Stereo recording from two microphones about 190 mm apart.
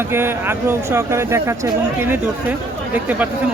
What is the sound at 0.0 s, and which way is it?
Speech, 10° right (ahead or behind).